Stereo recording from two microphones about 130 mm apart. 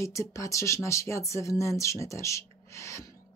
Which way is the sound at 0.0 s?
25° left (ahead or behind).